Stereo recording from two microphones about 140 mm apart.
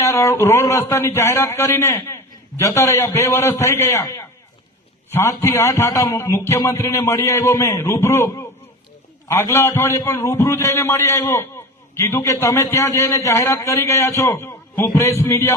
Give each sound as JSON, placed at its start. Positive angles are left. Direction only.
{"t": 0.0, "sound": "a man's voice", "side_deg": 20}